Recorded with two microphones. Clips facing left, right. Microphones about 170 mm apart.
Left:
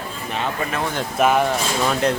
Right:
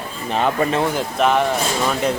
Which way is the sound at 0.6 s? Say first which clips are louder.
Right 7 dB; 40° right (ahead or behind).